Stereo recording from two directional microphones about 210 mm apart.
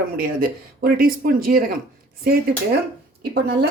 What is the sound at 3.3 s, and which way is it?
Speech, 50° right (ahead or behind).